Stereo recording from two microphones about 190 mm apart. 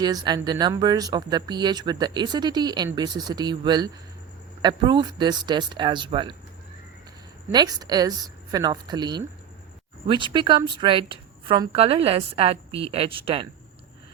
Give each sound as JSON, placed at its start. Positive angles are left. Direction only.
{"t": 0.0, "sound": "speech", "side_deg": -20}
{"t": 7.5, "sound": "speech", "side_deg": -20}